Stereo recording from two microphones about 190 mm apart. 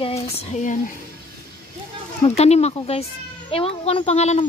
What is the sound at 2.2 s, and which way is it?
Speech, 35° left (ahead or behind).